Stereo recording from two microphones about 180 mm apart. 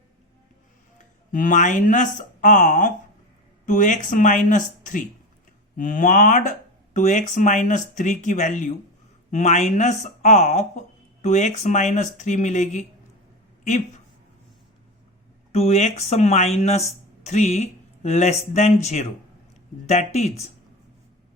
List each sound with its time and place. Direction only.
0.9 s speech: 45° left (ahead or behind)
15.5 s speech: 35° left (ahead or behind)